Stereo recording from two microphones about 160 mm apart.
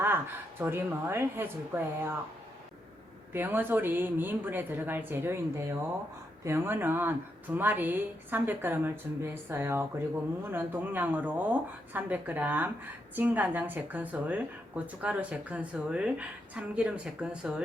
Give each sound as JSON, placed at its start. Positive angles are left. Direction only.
{"t": 0.6, "sound": "speech", "side_deg": -10}
{"t": 3.3, "sound": "speech", "side_deg": -15}